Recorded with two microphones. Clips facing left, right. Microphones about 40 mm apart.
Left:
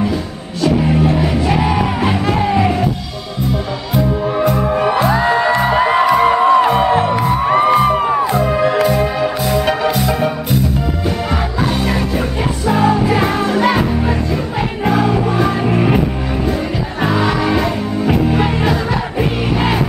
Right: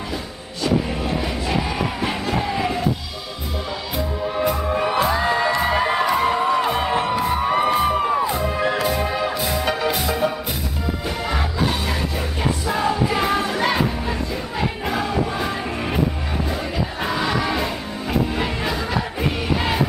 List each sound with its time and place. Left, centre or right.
0.9 s music: left
1.5 s music: left
2.5 s music: left
4.6 s music: centre
5.0 s music: left
5.6 s music: centre
6.7 s music: centre
8.2 s music: left
8.8 s music: centre
9.5 s music: left
12.6 s music: left
14.9 s music: left
17.0 s music: left